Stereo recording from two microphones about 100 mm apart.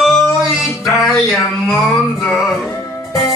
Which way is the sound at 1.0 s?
5° left (ahead or behind).